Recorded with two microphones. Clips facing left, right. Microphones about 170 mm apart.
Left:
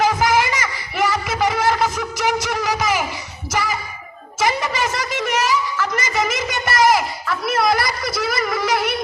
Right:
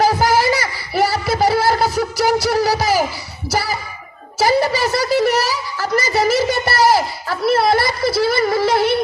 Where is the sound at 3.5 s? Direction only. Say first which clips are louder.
Right 2 dB; 35° right (ahead or behind).